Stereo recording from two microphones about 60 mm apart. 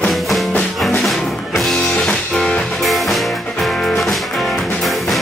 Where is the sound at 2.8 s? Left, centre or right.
Centre.